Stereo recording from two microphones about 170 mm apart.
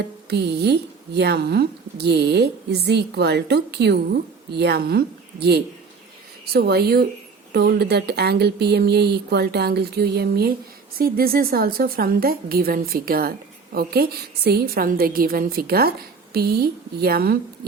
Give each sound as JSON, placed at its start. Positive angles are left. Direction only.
{"t": 0.3, "sound": "a woman's voice", "side_deg": -75}